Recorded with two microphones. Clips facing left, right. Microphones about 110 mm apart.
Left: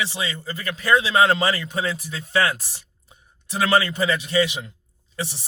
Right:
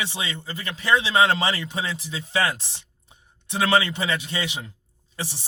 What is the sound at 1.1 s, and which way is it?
Speech, 35° left (ahead or behind).